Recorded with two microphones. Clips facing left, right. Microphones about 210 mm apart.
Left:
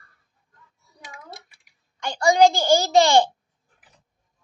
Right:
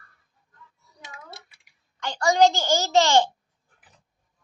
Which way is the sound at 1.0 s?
25° right (ahead or behind).